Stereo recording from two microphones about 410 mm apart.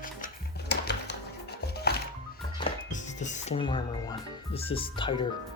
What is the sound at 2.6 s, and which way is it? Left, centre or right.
Music, centre.